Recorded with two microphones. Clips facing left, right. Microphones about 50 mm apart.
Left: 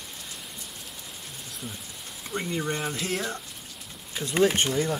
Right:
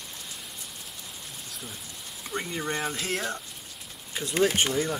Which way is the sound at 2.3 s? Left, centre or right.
Centre.